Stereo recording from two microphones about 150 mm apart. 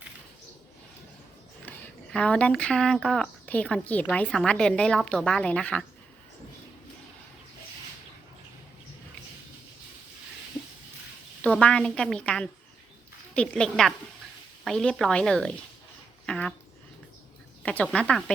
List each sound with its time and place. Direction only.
2.1 s a woman's voice: 5° left (ahead or behind)
11.4 s a woman's voice: 10° left (ahead or behind)
16.2 s a sound: 5° left (ahead or behind)
17.6 s a woman's voice: 5° left (ahead or behind)